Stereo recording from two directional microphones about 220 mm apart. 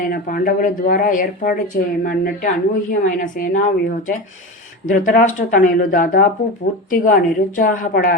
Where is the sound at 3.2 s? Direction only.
35° left (ahead or behind).